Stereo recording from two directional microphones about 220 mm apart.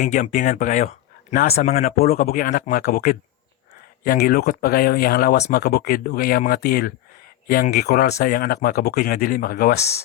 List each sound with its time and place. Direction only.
0.0 s speech: 35° left (ahead or behind)